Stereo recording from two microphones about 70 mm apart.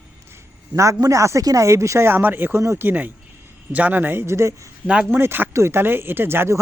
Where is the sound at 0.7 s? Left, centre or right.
Right.